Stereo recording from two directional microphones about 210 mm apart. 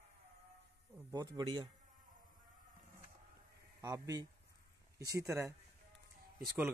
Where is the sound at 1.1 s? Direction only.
20° right (ahead or behind).